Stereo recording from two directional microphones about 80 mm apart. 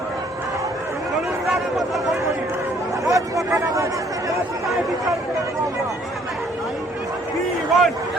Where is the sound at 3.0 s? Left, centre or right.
Right.